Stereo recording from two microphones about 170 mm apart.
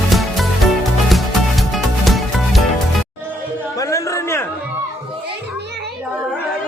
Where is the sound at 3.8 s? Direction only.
20° left (ahead or behind).